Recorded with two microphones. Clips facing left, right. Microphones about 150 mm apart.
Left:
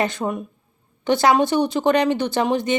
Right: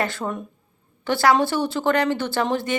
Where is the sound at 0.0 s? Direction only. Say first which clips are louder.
Left 3 dB; 20° left (ahead or behind).